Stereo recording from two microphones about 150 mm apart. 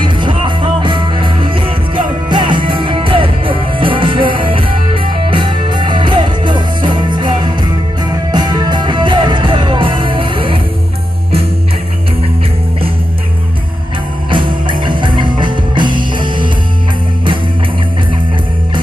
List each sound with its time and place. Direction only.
0.0 s music: 35° right (ahead or behind)
14.3 s music: 35° right (ahead or behind)